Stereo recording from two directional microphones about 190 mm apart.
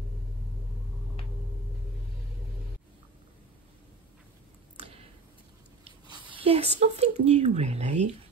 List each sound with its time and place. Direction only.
6.0 s speech: 25° right (ahead or behind)